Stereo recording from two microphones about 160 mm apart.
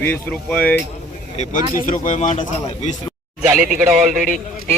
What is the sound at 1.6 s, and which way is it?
Speech, 25° right (ahead or behind).